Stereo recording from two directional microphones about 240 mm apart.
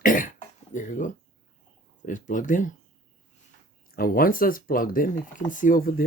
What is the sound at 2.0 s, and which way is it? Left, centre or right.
Speech, left.